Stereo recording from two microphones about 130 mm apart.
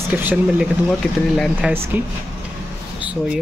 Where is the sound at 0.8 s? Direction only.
Centre (ahead or behind).